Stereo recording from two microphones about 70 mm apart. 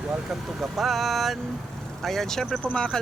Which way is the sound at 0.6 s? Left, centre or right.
Centre.